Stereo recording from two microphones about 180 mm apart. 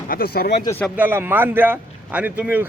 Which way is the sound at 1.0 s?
10° right (ahead or behind).